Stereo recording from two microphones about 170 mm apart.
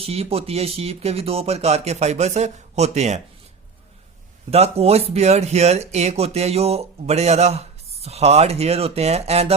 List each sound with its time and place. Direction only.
0.0 s speech: 35° right (ahead or behind)
4.5 s speech: 35° right (ahead or behind)